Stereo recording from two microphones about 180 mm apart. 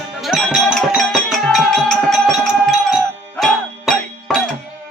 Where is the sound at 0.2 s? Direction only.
Centre (ahead or behind).